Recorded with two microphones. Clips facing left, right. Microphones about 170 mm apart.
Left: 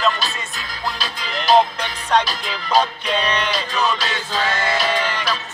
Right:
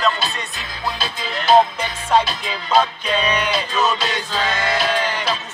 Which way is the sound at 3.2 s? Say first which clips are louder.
Right 2 dB; 10° right (ahead or behind).